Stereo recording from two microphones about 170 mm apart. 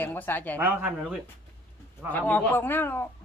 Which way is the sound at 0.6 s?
10° right (ahead or behind).